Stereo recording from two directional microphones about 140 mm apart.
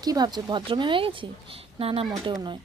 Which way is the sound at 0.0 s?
30° right (ahead or behind).